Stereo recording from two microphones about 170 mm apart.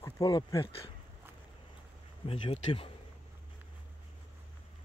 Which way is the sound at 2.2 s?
35° left (ahead or behind).